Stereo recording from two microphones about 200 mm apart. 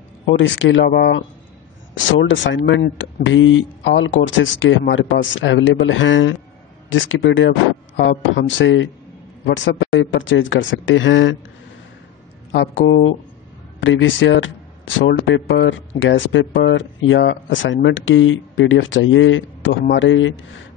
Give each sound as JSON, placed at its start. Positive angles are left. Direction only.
{"t": 0.3, "sound": "speech", "side_deg": 65}
{"t": 2.0, "sound": "speech", "side_deg": 70}
{"t": 12.5, "sound": "speech", "side_deg": 65}
{"t": 19.7, "sound": "a man's voice", "side_deg": 50}
{"t": 20.0, "sound": "speech", "side_deg": 70}